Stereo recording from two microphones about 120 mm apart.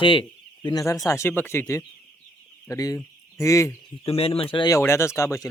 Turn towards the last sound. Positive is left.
turn(degrees=25)  # may be behind; listen again after turning